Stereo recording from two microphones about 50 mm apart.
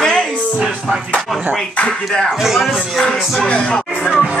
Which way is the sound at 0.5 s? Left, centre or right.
Centre.